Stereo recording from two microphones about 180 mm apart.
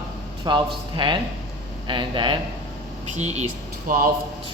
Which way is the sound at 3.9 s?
50° right (ahead or behind).